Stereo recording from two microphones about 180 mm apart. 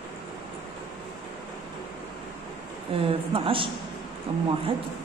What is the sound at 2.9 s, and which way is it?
Speech, 30° right (ahead or behind).